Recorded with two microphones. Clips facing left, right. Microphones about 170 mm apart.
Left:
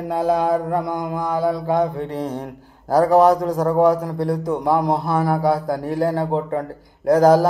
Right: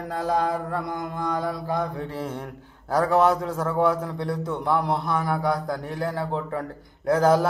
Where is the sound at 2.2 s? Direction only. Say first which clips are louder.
Left 5 dB; 35° left (ahead or behind).